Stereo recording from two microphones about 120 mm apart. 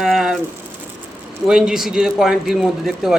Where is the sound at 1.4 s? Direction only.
5° right (ahead or behind).